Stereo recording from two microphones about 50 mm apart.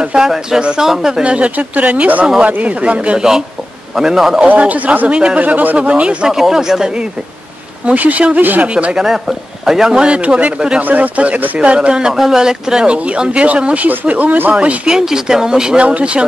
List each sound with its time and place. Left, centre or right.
0.0 s speech: centre
1.2 s speech: right
3.9 s speech: centre
4.6 s speech: right
5.8 s speech: right
6.2 s speech: centre
7.8 s speech: right
8.4 s speech: right
8.7 s speech: centre
12.1 s speech: centre
12.8 s speech: right
14.9 s speech: centre